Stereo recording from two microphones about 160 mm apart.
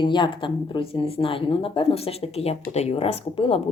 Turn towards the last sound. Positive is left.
turn(degrees=35)  # may be behind; listen again after turning